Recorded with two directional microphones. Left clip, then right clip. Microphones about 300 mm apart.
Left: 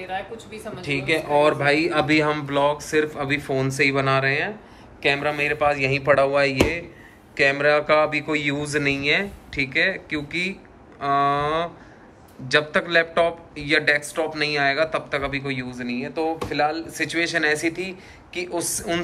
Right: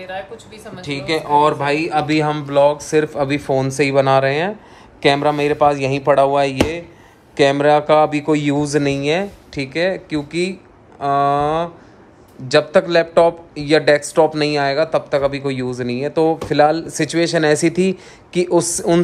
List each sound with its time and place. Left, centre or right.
0.1 s speech: centre